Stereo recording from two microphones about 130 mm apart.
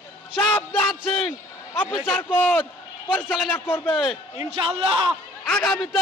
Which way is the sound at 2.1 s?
10° left (ahead or behind).